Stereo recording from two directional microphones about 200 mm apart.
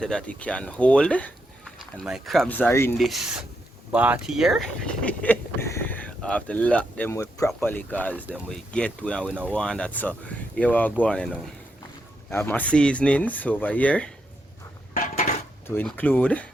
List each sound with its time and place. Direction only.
0.0 s speech: 5° left (ahead or behind)
3.0 s speech: centre (ahead or behind)
14.9 s dishes: 40° left (ahead or behind)
15.6 s speech: 10° left (ahead or behind)